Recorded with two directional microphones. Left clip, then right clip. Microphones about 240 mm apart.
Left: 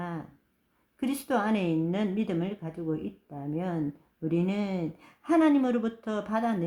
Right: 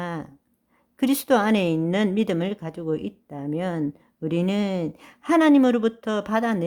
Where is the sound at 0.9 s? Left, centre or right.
Right.